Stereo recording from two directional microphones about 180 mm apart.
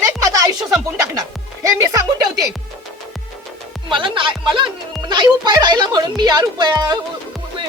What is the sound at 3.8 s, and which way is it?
Speech, 25° right (ahead or behind).